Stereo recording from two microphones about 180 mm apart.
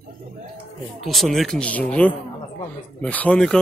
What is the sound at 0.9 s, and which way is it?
Speech, centre (ahead or behind).